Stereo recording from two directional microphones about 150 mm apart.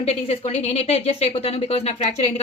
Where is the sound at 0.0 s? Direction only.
40° left (ahead or behind).